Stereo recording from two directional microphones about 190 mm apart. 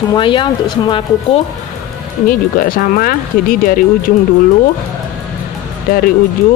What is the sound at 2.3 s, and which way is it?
Speech, 45° left (ahead or behind).